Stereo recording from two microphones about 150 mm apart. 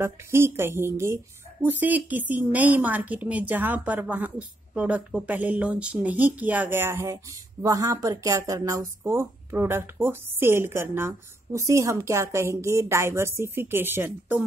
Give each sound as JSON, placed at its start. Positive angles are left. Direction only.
{"t": 0.0, "sound": "a woman's voice", "side_deg": -15}